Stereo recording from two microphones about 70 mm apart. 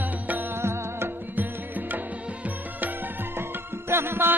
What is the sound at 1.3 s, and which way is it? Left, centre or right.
Music, right.